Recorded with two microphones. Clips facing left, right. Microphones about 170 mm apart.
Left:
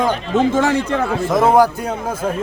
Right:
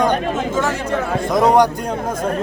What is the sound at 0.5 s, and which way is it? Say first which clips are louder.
Speech: left 3 dB; 60° left (ahead or behind).